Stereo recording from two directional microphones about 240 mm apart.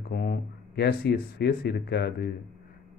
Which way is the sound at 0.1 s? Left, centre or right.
Left.